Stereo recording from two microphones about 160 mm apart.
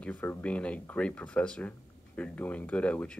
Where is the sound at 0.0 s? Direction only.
10° left (ahead or behind).